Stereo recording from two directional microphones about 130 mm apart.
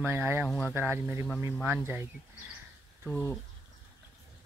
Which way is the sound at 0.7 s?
15° right (ahead or behind).